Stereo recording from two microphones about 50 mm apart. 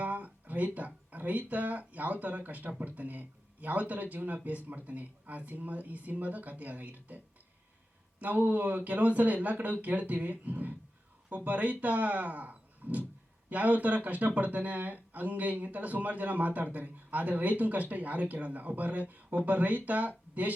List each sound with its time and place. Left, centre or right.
0.0 s speech: right
8.2 s speech: right